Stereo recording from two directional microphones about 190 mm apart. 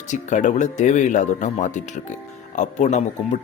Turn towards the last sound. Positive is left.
turn(degrees=40)  # may be behind; listen again after turning